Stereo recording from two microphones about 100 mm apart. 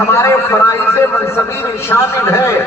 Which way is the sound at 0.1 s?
30° left (ahead or behind).